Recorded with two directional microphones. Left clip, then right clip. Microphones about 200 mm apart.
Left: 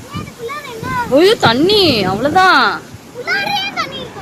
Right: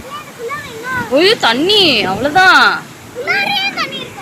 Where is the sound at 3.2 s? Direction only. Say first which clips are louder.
Right 2 dB; 65° left (ahead or behind).